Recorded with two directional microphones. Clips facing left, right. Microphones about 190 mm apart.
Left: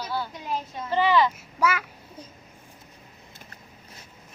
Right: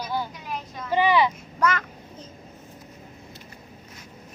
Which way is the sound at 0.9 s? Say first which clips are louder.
Right 1 dB; 15° right (ahead or behind).